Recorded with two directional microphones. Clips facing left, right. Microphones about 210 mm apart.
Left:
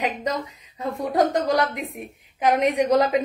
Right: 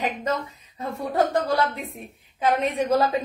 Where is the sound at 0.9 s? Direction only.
15° left (ahead or behind).